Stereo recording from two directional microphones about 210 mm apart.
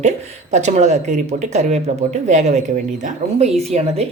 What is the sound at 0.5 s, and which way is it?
Speech, 35° right (ahead or behind).